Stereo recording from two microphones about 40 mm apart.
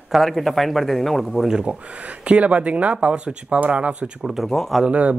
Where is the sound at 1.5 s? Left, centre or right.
Right.